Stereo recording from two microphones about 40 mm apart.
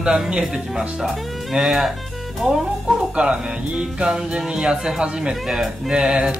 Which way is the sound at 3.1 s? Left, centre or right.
Right.